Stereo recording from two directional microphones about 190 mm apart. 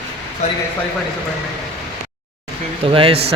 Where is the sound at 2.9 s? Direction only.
30° right (ahead or behind).